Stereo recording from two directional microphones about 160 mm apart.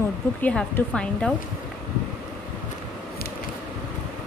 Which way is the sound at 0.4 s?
10° left (ahead or behind).